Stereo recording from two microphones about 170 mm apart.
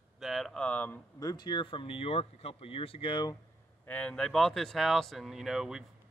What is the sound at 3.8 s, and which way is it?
Speech, 10° left (ahead or behind).